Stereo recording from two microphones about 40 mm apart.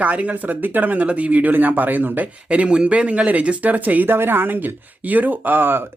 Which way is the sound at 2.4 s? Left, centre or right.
Right.